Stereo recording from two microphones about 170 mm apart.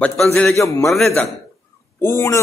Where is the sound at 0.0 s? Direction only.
5° left (ahead or behind).